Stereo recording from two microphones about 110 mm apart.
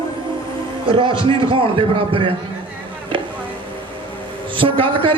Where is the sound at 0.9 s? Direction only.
50° right (ahead or behind).